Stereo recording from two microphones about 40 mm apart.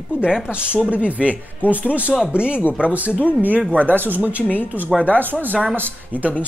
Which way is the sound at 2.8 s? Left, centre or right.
Right.